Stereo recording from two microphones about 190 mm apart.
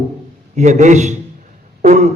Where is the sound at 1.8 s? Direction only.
40° right (ahead or behind).